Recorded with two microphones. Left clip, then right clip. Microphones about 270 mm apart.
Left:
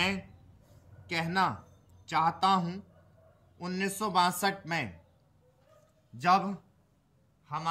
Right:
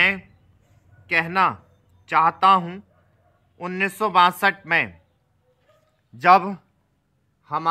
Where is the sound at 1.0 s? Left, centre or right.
Centre.